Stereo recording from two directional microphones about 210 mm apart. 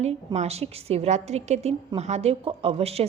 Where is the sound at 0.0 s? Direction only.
30° right (ahead or behind).